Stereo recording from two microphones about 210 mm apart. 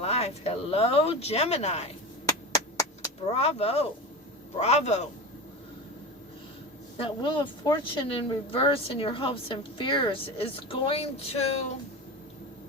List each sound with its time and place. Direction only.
0.0 s speech: 30° left (ahead or behind)
3.3 s a man's voice: 30° left (ahead or behind)
6.9 s speech: 25° left (ahead or behind)